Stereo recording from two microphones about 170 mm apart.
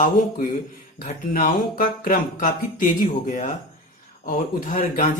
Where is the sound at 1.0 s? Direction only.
50° left (ahead or behind).